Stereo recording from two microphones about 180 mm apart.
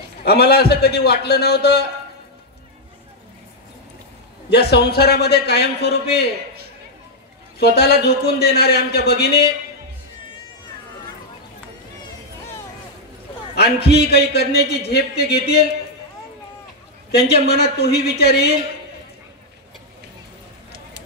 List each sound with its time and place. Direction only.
0.2 s a man's voice: 60° left (ahead or behind)
4.5 s a man's voice: 65° left (ahead or behind)
7.5 s a man's voice: 60° left (ahead or behind)
13.6 s a man's voice: 65° left (ahead or behind)
17.3 s a man's voice: 65° left (ahead or behind)